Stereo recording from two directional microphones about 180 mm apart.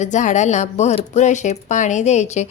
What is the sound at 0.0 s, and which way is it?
Speech, 45° left (ahead or behind).